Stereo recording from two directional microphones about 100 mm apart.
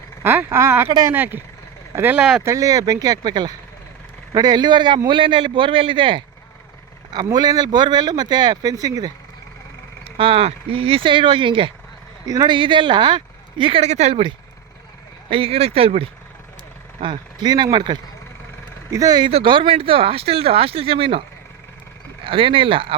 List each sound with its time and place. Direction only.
0.2 s speech: 20° right (ahead or behind)
2.4 s speech: 30° right (ahead or behind); by 6.2 s 55° right (ahead or behind)
7.1 s speech: 45° right (ahead or behind)
10.0 s speech: 65° right (ahead or behind); by 14.3 s 85° right
15.3 s speech: 70° right (ahead or behind)
17.0 s speech: 50° right (ahead or behind)
18.9 s speech: 35° right (ahead or behind)
19.5 s speech: 65° right (ahead or behind)